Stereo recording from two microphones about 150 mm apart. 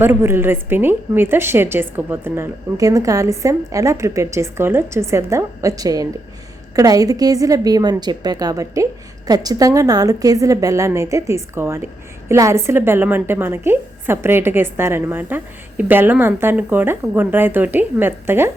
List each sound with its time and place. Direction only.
0.0 s a woman's voice: 15° right (ahead or behind)